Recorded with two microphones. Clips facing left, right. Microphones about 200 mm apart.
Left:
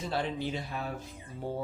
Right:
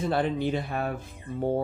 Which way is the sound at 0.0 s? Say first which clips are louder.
Right 7 dB; 55° right (ahead or behind).